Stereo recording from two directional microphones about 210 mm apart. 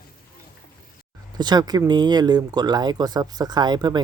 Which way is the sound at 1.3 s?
20° right (ahead or behind).